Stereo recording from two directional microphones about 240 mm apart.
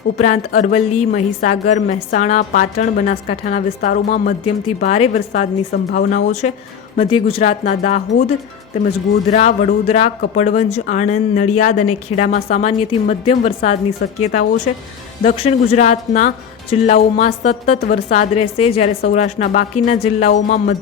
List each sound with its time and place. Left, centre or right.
0.2 s a woman's voice: left
9.3 s a woman's voice: left